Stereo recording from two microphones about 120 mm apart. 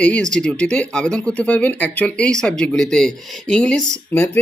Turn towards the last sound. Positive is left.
turn(degrees=15)  # may be behind; listen again after turning